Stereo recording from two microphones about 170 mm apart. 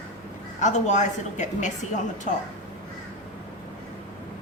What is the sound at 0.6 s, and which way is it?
A woman's voice, 45° left (ahead or behind).